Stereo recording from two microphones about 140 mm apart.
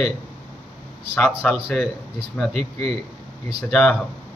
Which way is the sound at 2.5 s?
50° right (ahead or behind).